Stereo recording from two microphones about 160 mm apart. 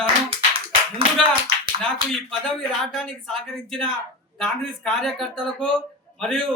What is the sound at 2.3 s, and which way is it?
A man's voice, 5° left (ahead or behind).